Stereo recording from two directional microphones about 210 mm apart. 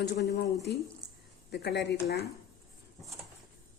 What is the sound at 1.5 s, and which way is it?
Speech, 50° left (ahead or behind).